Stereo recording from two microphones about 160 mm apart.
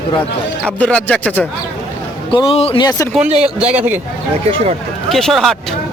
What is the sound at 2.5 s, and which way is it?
Speech, 35° left (ahead or behind).